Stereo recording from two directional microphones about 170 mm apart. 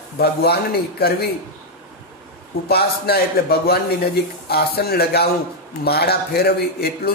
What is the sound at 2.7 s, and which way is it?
Speech, 70° left (ahead or behind).